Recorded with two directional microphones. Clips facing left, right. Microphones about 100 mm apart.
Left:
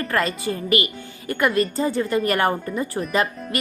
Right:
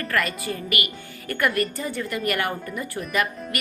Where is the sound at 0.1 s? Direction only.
25° left (ahead or behind).